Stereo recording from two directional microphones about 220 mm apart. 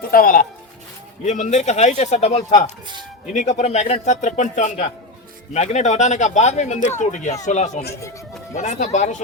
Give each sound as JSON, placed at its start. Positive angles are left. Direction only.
{"t": 0.1, "sound": "speech", "side_deg": 40}